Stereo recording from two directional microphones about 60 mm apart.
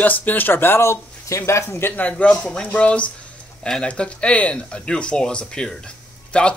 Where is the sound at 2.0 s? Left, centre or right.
Left.